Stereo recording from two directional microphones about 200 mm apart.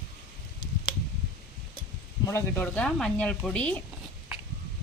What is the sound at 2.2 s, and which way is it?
Speech, 10° left (ahead or behind).